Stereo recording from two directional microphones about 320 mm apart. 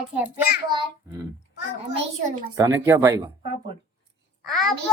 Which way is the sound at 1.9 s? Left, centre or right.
Right.